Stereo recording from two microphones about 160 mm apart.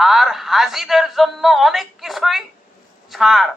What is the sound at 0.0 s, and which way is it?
Speech, centre (ahead or behind).